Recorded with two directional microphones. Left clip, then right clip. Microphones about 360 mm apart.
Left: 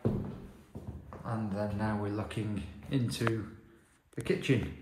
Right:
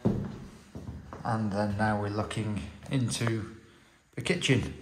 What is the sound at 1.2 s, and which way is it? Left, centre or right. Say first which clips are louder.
Speech: right 6 dB; centre.